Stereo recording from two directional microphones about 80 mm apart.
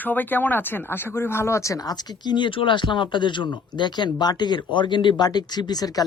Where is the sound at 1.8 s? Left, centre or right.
Left.